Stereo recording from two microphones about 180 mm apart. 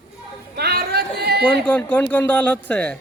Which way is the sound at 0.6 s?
65° right (ahead or behind).